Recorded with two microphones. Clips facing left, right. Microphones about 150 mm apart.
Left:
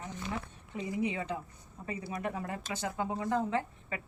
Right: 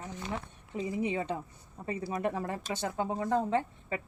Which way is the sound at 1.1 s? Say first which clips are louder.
Right 3 dB; 25° right (ahead or behind).